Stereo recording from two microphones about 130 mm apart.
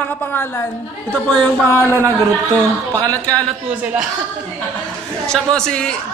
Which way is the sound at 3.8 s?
10° right (ahead or behind).